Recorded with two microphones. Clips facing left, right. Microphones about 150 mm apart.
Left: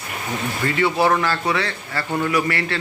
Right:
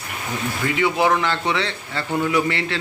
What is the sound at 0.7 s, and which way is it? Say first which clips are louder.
Speech: left 1 dB; 15° right (ahead or behind).